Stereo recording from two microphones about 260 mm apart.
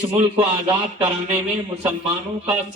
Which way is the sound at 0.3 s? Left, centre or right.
Centre.